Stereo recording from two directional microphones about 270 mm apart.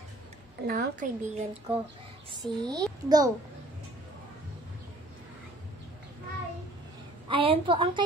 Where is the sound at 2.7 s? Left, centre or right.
Centre.